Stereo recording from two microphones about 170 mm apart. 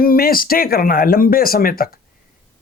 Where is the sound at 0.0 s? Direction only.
60° left (ahead or behind).